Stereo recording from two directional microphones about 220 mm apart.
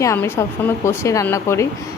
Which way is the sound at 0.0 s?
10° left (ahead or behind).